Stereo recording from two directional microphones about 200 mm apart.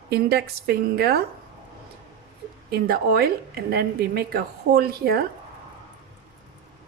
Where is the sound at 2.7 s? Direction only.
50° right (ahead or behind).